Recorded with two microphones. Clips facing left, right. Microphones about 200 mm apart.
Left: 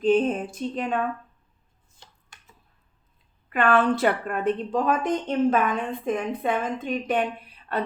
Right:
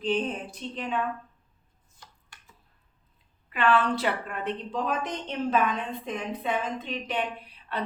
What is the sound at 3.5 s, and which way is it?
A woman's voice, 50° left (ahead or behind).